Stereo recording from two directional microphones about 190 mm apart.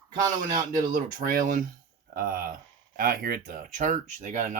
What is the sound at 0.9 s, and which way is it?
Speech, 45° right (ahead or behind).